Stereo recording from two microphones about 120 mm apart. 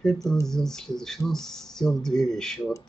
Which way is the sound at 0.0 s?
5° left (ahead or behind).